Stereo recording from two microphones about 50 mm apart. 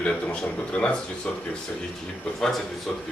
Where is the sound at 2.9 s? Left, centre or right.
Centre.